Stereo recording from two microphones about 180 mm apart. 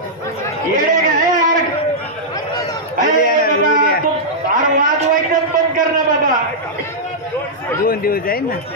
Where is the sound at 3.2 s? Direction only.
55° left (ahead or behind).